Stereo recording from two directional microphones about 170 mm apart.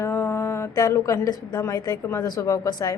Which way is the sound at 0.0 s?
15° left (ahead or behind).